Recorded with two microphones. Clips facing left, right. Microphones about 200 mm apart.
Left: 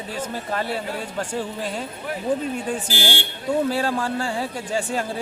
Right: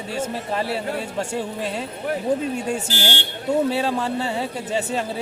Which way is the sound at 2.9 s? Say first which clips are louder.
Even; 10° left (ahead or behind).